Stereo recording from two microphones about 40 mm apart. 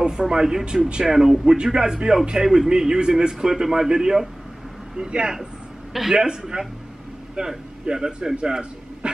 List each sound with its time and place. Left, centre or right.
0.0 s a man's voice: right
1.4 s a man's voice: centre